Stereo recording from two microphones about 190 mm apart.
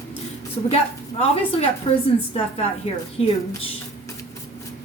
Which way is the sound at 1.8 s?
30° left (ahead or behind).